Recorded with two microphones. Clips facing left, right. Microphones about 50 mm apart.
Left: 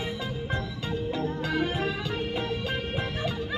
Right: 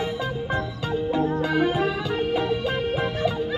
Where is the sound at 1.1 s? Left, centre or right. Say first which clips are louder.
Right 9 dB; right.